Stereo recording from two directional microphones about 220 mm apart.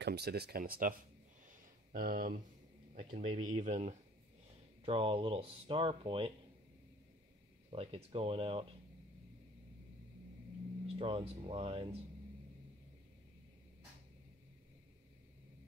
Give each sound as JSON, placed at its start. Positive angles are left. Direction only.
{"t": 0.0, "sound": "speech", "side_deg": -50}
{"t": 7.7, "sound": "speech", "side_deg": -25}
{"t": 10.9, "sound": "speech", "side_deg": -25}